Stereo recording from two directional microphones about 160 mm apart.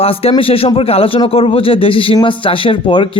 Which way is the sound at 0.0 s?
35° left (ahead or behind).